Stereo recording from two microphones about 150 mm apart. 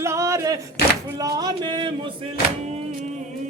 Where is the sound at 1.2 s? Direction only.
25° right (ahead or behind).